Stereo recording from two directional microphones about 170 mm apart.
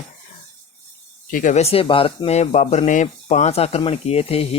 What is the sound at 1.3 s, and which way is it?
Speech, 50° left (ahead or behind).